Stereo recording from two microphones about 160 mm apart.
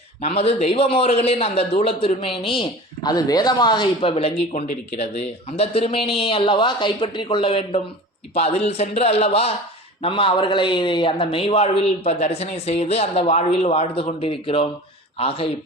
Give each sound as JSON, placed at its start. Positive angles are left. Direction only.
{"t": 0.2, "sound": "a man's voice", "side_deg": 40}